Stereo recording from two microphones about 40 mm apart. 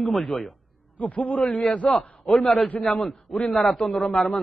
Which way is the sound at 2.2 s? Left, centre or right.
Centre.